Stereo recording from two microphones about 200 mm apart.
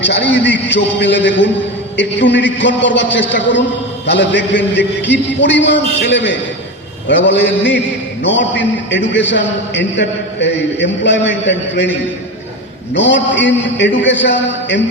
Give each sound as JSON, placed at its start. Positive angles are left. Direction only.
{"t": 0.0, "sound": "music", "side_deg": 60}
{"t": 0.7, "sound": "a man's voice", "side_deg": 60}